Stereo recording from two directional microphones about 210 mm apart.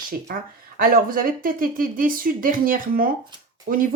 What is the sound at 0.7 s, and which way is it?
Speech, 40° right (ahead or behind).